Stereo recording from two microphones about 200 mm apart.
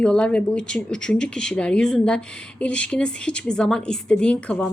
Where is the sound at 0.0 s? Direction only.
5° left (ahead or behind).